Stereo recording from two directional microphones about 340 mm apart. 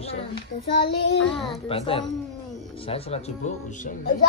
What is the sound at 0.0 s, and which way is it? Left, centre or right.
A child's voice, centre.